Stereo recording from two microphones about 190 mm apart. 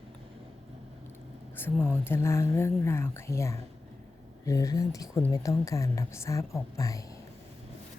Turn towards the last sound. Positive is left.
turn(degrees=15)  # may be behind; listen again after turning